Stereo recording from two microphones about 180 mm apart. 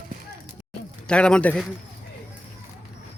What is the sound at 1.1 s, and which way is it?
Speech, 5° left (ahead or behind).